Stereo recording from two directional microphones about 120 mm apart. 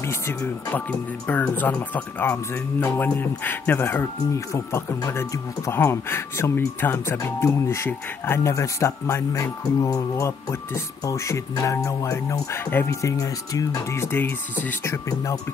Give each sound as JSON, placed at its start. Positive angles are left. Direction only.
{"t": 0.4, "sound": "speech", "side_deg": 15}